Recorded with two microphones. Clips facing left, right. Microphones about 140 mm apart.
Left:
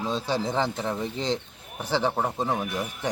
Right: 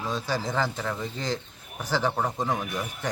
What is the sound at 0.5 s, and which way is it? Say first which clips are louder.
Speech: left 2 dB; 25° left (ahead or behind).